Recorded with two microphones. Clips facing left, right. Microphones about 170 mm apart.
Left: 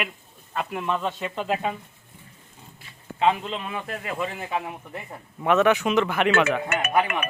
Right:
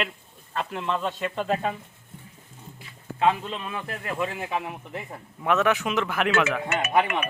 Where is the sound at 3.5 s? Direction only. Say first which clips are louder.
Left 2 dB; 5° left (ahead or behind).